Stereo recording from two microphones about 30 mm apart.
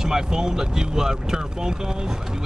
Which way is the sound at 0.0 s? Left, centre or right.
Centre.